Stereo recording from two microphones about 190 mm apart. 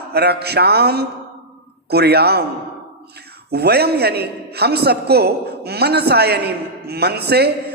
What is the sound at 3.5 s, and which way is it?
A man's voice, 55° right (ahead or behind).